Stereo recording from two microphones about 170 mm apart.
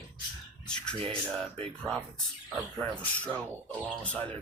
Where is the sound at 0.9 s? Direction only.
35° right (ahead or behind).